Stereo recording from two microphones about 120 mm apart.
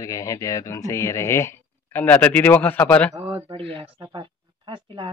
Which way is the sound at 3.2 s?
20° right (ahead or behind).